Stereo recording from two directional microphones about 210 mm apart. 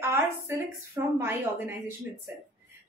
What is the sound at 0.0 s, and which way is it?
A woman's voice, 10° right (ahead or behind).